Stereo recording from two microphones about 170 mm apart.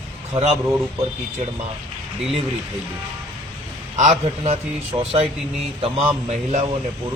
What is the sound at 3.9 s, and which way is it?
A man's voice, 40° right (ahead or behind).